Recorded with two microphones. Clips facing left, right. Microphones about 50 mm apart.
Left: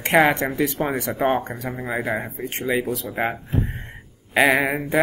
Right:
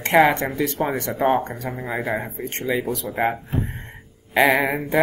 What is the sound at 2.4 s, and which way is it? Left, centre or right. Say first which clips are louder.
Speech: left 1 dB; centre.